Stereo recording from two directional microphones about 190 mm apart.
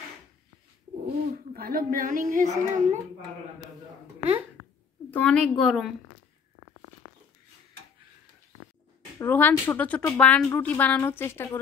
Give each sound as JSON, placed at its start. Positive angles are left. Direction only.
{"t": 1.0, "sound": "speech", "side_deg": -50}
{"t": 5.1, "sound": "a woman's voice", "side_deg": 5}
{"t": 9.2, "sound": "a woman's voice", "side_deg": 10}